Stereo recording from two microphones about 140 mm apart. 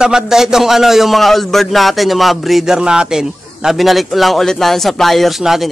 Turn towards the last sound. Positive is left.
turn(degrees=0)  # may be behind; listen again after turning